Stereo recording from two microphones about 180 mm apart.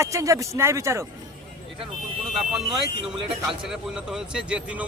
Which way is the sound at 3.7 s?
5° right (ahead or behind).